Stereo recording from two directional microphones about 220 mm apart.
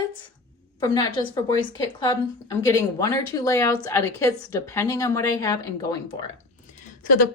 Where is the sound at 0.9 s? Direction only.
20° left (ahead or behind).